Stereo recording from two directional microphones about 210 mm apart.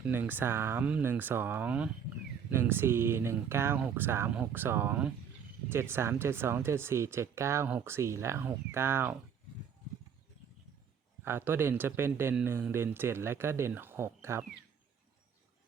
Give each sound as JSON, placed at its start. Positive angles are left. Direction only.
{"t": 0.0, "sound": "speech", "side_deg": -10}
{"t": 11.3, "sound": "speech", "side_deg": -10}